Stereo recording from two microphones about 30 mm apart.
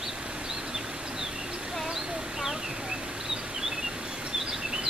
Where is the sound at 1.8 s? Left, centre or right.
Centre.